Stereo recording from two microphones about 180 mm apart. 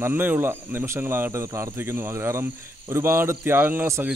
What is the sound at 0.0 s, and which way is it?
A man's voice, 10° right (ahead or behind).